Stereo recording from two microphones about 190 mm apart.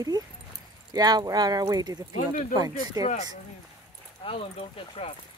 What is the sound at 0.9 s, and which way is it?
Speech, 20° right (ahead or behind).